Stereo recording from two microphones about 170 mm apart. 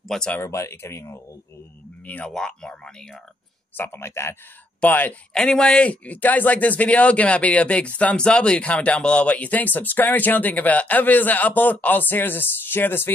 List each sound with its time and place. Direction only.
0.1 s speech: 5° left (ahead or behind)
0.4 s speech: 15° left (ahead or behind)